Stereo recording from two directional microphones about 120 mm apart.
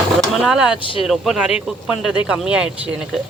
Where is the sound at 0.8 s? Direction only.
45° left (ahead or behind).